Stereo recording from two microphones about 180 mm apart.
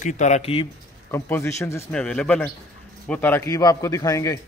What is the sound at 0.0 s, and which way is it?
Speech, 40° left (ahead or behind).